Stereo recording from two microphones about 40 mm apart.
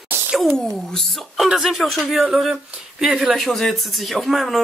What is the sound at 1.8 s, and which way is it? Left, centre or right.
Speech, centre.